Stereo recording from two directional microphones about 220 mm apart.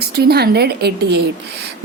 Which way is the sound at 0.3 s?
45° right (ahead or behind).